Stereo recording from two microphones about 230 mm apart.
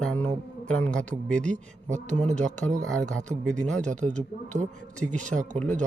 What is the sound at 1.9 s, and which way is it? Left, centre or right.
Speech, right.